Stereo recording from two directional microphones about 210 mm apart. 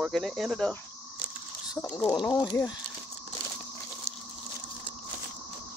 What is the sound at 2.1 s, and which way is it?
Speech, 20° left (ahead or behind).